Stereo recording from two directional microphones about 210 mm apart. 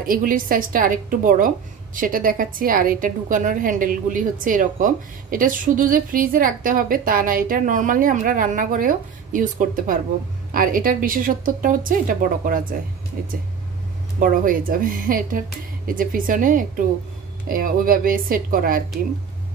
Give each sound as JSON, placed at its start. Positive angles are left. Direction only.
{"t": 0.0, "sound": "a woman's voice", "side_deg": -40}
{"t": 14.2, "sound": "a woman's voice", "side_deg": -40}